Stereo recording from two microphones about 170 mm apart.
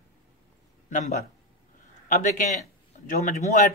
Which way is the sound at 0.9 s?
50° left (ahead or behind).